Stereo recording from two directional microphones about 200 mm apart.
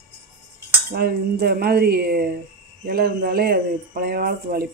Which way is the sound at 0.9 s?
50° right (ahead or behind).